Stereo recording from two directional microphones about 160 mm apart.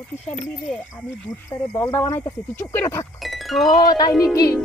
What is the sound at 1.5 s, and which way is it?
Speech, 15° left (ahead or behind).